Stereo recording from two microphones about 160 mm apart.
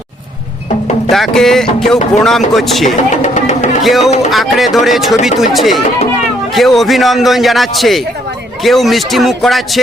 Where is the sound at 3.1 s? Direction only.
45° left (ahead or behind).